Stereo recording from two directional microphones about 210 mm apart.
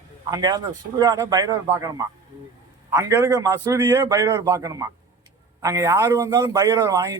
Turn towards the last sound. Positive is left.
turn(degrees=-15)  # may be behind; listen again after turning